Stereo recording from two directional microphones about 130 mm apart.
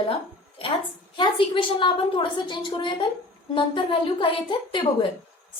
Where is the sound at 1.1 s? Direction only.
40° left (ahead or behind).